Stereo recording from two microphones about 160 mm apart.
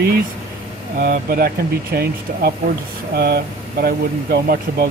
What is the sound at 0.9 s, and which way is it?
Speech, 60° right (ahead or behind).